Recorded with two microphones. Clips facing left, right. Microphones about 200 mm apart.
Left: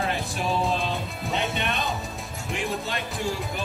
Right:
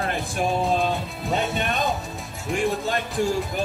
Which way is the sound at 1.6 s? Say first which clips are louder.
Right 3 dB; 40° right (ahead or behind).